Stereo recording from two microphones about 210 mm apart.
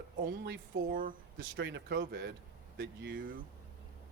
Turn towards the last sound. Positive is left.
turn(degrees=-60)  # may be behind; listen again after turning